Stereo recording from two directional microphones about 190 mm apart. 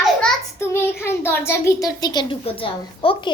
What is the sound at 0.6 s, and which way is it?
A child's voice, 10° left (ahead or behind).